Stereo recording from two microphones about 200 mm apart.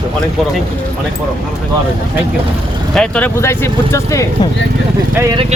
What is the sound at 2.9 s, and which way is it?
Speech, 5° left (ahead or behind).